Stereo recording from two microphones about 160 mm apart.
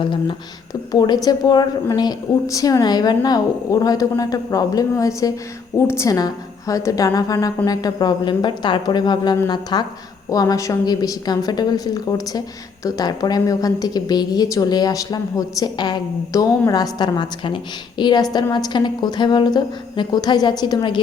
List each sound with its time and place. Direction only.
0.0 s a woman's voice: 30° left (ahead or behind)